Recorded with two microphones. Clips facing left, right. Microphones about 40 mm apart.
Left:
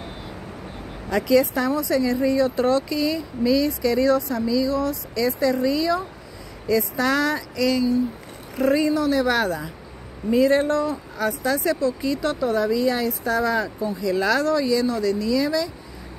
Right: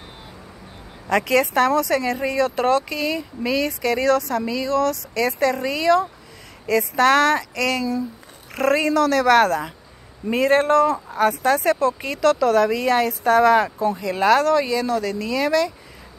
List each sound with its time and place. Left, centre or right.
1.0 s speech: right
8.5 s speech: right
11.1 s speech: right
12.2 s speech: right
13.9 s speech: right